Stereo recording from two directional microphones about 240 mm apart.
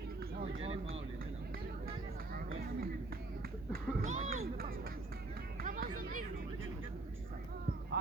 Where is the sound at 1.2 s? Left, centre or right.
Right.